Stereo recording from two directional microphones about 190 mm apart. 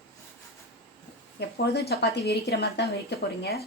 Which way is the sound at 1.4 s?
60° left (ahead or behind).